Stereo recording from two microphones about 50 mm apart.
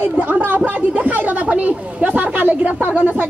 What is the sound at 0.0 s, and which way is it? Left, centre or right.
Speech, right.